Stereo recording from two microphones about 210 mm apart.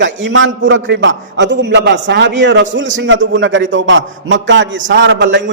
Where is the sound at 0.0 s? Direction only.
60° right (ahead or behind).